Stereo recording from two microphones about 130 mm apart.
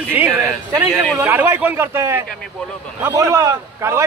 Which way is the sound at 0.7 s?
30° right (ahead or behind).